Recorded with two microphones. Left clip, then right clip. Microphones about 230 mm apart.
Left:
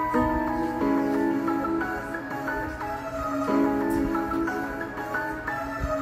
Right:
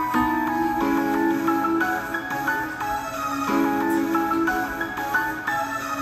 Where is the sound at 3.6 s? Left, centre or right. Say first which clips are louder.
Right 3 dB; right.